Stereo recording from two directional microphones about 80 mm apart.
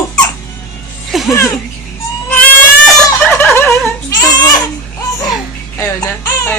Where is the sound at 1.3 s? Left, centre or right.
Left.